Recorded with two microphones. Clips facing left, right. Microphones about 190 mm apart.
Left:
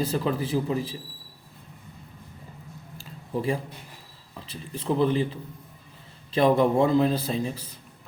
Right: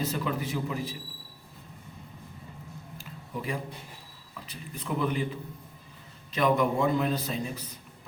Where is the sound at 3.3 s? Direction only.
30° left (ahead or behind).